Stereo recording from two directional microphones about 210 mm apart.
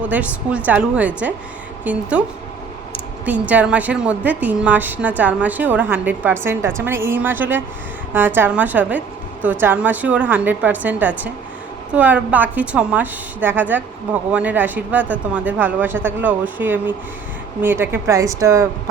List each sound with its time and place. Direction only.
0.1 s a woman's voice: 5° right (ahead or behind)
3.2 s a woman's voice: 5° right (ahead or behind)